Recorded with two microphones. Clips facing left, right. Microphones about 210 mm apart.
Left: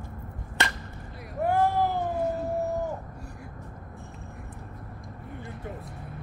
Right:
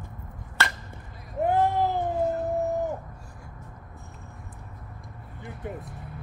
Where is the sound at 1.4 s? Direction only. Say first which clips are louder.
Right 1 dB; 20° right (ahead or behind).